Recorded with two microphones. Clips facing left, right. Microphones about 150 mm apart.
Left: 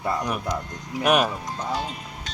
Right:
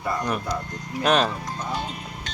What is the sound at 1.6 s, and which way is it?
Speech, 35° left (ahead or behind).